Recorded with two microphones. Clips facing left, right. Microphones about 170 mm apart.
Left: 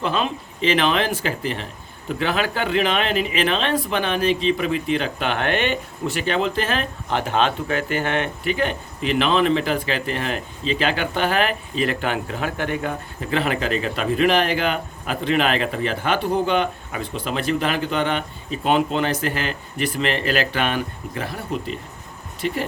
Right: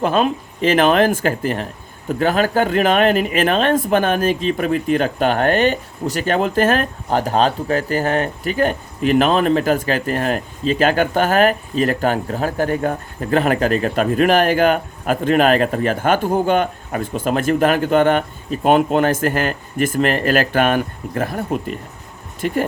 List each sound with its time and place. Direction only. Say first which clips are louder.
0.0 s speech: right 6 dB; 50° right (ahead or behind)